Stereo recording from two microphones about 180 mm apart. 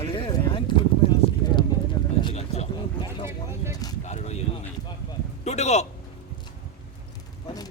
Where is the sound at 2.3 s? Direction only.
35° left (ahead or behind).